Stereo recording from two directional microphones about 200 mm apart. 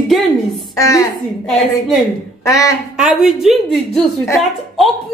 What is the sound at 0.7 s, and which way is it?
Speech, 15° left (ahead or behind).